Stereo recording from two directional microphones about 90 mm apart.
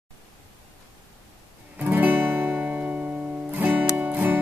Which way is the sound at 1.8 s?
20° right (ahead or behind).